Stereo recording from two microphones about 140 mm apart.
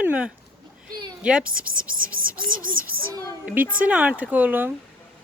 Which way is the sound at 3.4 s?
10° right (ahead or behind).